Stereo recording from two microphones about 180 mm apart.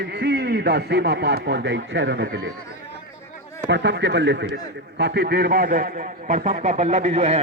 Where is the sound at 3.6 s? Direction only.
75° right (ahead or behind).